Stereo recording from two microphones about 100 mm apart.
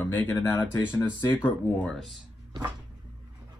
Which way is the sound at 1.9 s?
Centre (ahead or behind).